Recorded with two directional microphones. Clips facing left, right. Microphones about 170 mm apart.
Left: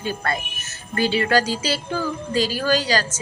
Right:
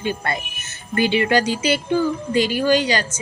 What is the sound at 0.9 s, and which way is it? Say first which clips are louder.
Speech: right 2 dB; 35° left (ahead or behind).